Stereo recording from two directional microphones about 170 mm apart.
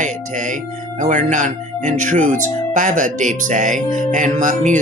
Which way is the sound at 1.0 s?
45° right (ahead or behind).